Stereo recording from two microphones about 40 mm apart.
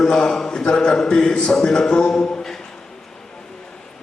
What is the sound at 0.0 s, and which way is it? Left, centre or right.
A man's voice, centre.